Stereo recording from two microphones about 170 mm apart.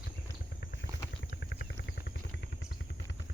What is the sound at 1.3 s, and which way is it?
Vehicle, 85° left.